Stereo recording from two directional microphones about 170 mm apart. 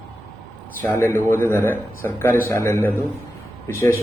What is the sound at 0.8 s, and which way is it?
A man's voice, 15° left (ahead or behind).